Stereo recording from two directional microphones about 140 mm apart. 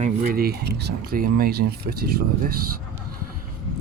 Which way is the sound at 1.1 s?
90° right.